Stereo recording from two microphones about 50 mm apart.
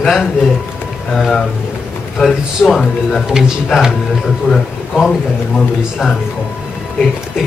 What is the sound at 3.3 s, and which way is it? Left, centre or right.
Speech, centre.